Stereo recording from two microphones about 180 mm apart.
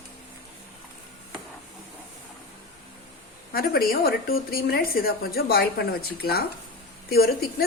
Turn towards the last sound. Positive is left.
turn(degrees=60)  # may be behind; listen again after turning